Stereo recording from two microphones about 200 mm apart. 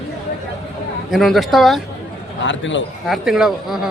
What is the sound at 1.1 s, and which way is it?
Speech, centre (ahead or behind).